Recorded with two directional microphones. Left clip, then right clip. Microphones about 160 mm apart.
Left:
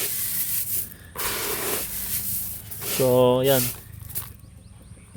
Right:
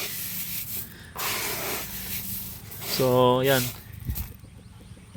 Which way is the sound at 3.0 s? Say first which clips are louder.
Left 2 dB; 15° left (ahead or behind).